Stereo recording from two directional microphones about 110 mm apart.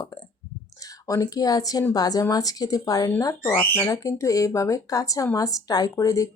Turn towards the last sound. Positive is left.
turn(degrees=30)  # may be behind; listen again after turning